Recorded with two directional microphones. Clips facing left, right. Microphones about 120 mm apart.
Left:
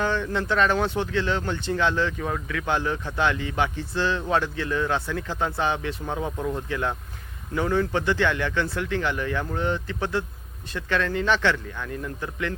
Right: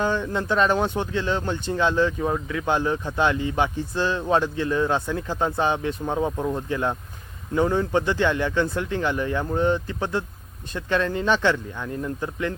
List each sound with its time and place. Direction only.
0.0 s speech: 15° right (ahead or behind)